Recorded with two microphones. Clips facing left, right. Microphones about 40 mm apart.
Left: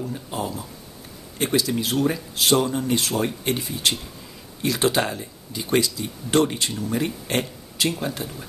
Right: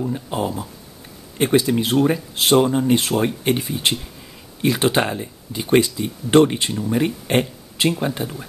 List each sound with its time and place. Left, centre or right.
0.0 s speech: right
7.2 s a sound: right
8.0 s speech: right